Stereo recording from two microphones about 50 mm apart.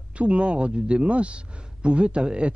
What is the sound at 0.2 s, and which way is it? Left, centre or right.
A man's voice, right.